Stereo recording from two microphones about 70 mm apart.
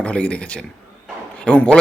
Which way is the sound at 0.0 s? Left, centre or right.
Centre.